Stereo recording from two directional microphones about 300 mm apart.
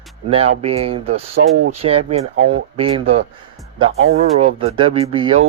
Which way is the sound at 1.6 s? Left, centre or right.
Right.